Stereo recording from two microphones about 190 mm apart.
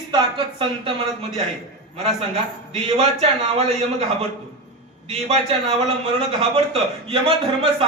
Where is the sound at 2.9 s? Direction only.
35° right (ahead or behind).